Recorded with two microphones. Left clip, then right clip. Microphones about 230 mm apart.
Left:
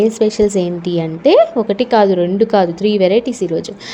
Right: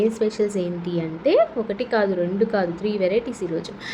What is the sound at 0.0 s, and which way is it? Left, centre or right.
Speech, left.